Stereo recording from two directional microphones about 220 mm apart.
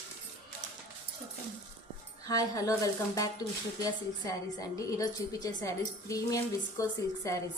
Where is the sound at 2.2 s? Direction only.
15° left (ahead or behind).